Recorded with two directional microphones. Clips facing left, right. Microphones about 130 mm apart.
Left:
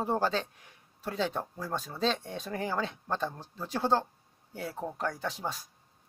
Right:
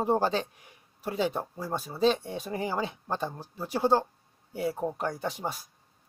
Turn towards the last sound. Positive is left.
turn(degrees=-10)  # may be behind; listen again after turning